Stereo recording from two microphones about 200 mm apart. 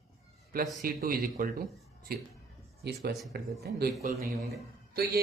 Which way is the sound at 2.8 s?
55° right (ahead or behind).